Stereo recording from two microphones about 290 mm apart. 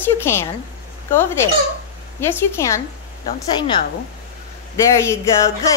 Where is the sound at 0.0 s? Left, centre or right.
Centre.